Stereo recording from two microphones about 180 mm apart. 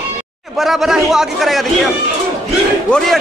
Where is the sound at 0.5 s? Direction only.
Centre (ahead or behind).